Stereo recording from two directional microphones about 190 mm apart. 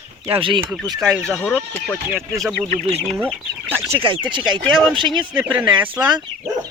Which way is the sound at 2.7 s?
35° right (ahead or behind).